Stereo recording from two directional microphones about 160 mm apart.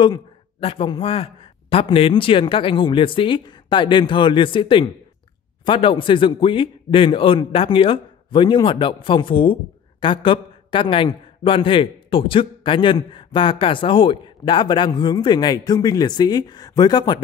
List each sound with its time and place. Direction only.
0.0 s a man's voice: 35° left (ahead or behind)